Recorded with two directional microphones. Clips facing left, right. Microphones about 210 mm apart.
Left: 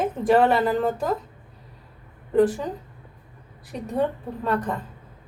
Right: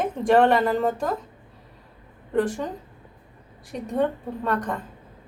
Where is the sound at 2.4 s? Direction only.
5° left (ahead or behind).